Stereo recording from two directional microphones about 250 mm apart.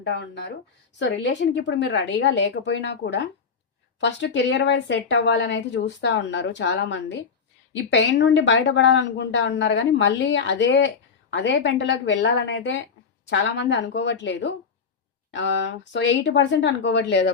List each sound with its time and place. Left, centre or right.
0.0 s speech: left